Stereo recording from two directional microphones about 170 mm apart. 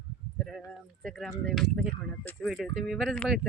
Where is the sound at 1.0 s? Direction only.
Centre (ahead or behind).